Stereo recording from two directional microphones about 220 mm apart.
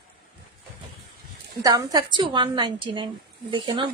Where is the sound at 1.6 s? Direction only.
15° right (ahead or behind).